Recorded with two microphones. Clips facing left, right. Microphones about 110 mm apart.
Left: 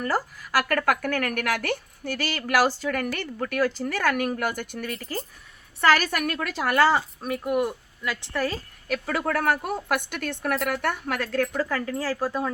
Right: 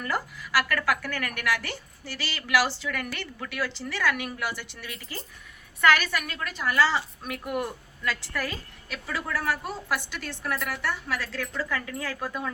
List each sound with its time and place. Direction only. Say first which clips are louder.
0.0 s speech: left 4 dB; 40° left (ahead or behind)
7.2 s speech: left 6 dB; 35° left (ahead or behind)
7.5 s a woman's voice: left 5 dB; 15° left (ahead or behind)
8.9 s speech: left 6 dB; 55° left (ahead or behind); by 12.5 s 35° left (ahead or behind)